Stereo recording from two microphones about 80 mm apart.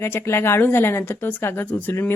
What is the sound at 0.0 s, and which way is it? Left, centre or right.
Speech, left.